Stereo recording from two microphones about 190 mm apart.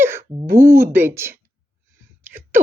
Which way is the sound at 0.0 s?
10° right (ahead or behind).